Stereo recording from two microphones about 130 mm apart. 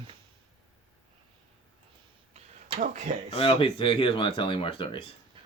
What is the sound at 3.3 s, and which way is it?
Speech, 45° left (ahead or behind).